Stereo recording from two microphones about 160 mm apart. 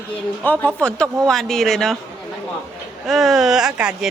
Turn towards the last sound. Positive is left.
turn(degrees=-5)  # may be behind; listen again after turning